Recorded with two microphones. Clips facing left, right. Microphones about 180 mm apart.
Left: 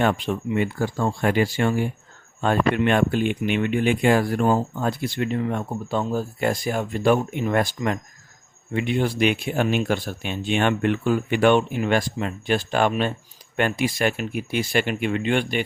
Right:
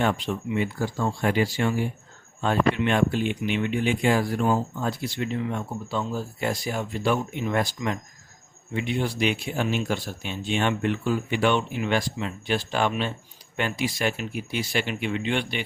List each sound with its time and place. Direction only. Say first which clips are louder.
0.0 s speech: left 3 dB; 55° left (ahead or behind)